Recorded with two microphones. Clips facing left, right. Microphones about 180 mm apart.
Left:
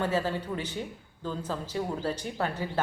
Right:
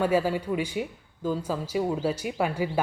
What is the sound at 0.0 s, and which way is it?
Speech, 10° right (ahead or behind).